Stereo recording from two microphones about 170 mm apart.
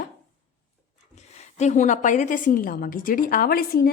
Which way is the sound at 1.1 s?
40° left (ahead or behind).